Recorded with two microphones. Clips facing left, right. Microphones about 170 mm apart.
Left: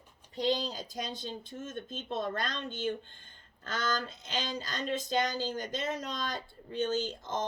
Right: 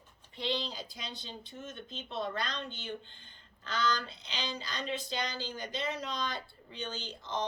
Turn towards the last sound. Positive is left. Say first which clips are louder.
# left 4 dB
turn(degrees=45)  # may be behind; listen again after turning